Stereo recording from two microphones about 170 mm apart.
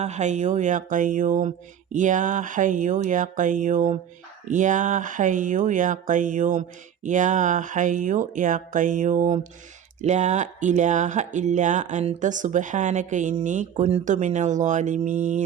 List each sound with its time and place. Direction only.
0.0 s speech: 45° right (ahead or behind)